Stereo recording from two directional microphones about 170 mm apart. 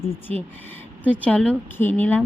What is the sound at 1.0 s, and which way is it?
Speech, 10° left (ahead or behind).